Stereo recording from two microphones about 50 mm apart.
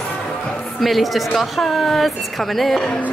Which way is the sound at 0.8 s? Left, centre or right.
Centre.